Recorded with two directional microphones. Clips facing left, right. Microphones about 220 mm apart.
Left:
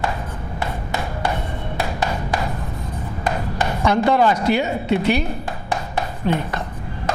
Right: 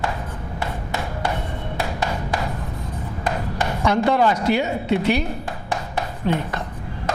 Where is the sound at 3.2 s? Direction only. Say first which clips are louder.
Left 2 dB; 20° left (ahead or behind).